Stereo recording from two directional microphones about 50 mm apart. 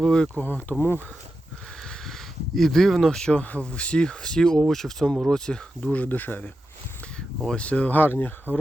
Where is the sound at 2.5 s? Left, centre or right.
Centre.